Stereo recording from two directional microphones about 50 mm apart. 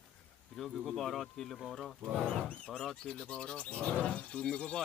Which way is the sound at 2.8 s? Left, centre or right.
Centre.